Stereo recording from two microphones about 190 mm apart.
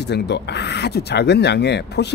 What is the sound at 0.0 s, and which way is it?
Speech, 60° left (ahead or behind).